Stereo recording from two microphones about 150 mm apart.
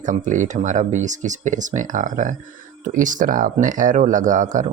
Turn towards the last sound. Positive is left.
turn(degrees=-55)  # may be behind; listen again after turning